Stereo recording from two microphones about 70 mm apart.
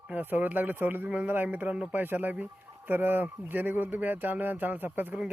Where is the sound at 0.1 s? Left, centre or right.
Right.